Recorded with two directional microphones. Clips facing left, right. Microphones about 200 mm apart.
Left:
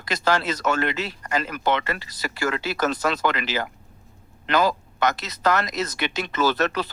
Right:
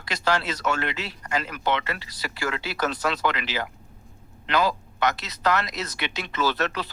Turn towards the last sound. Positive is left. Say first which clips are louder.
# left 4 dB
turn(degrees=45)  # may be behind; listen again after turning